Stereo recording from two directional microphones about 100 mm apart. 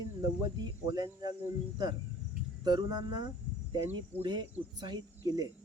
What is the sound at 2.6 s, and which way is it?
Speech, 45° right (ahead or behind).